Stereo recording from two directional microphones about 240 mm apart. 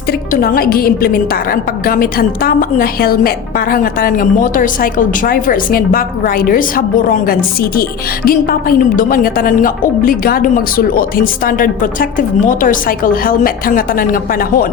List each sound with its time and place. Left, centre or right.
0.3 s a woman's voice: left